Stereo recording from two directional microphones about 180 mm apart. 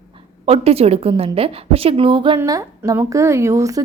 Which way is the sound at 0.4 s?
35° right (ahead or behind).